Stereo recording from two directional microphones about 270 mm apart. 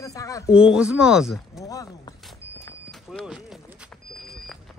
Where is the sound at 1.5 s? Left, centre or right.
Centre.